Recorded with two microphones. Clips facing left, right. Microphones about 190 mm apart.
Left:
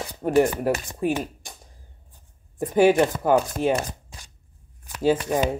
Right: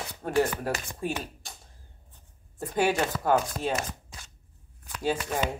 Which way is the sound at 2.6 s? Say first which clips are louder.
Left 9 dB; 20° left (ahead or behind).